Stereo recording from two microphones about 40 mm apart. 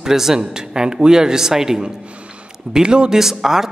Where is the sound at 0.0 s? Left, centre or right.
Centre.